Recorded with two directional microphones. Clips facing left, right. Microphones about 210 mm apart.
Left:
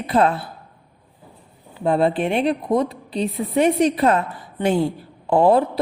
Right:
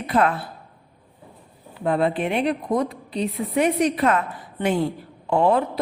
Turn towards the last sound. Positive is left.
turn(degrees=35)  # may be behind; listen again after turning